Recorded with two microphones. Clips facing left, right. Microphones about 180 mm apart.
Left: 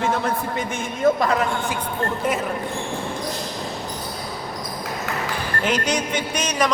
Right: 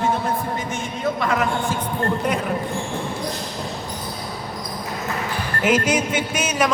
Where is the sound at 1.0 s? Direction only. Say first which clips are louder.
Left 5 dB; 40° left (ahead or behind).